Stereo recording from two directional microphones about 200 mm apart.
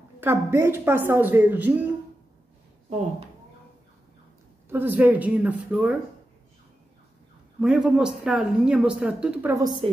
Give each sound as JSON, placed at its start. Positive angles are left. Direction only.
{"t": 0.2, "sound": "a woman's voice", "side_deg": -10}
{"t": 2.9, "sound": "speech", "side_deg": -35}
{"t": 4.6, "sound": "a woman's voice", "side_deg": -10}
{"t": 7.6, "sound": "speech", "side_deg": -5}